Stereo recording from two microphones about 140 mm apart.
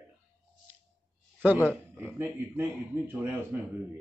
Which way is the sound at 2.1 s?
15° right (ahead or behind).